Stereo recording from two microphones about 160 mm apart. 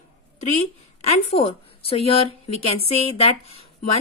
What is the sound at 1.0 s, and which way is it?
A woman's voice, 35° left (ahead or behind).